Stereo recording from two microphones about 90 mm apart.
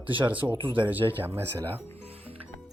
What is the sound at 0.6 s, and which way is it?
Speech, 65° right (ahead or behind).